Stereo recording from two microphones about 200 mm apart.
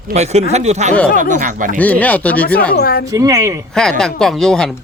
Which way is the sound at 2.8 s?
50° left (ahead or behind).